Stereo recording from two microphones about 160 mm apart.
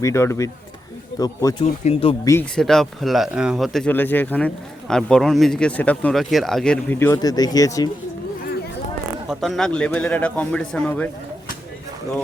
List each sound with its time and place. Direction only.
0.0 s a man's voice: 15° left (ahead or behind)
1.8 s speech: 40° left (ahead or behind)
2.2 s speech: 15° left (ahead or behind)
2.6 s speech: 5° left (ahead or behind)
3.9 s speech: 10° left (ahead or behind)
9.3 s speech: centre (ahead or behind)